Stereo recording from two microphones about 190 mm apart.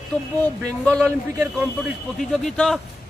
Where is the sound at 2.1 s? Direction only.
Centre (ahead or behind).